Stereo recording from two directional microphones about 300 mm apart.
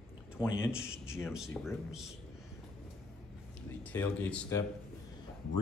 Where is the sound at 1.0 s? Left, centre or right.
Centre.